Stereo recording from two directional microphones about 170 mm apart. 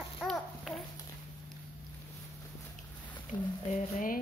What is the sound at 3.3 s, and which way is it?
Speech, 25° left (ahead or behind).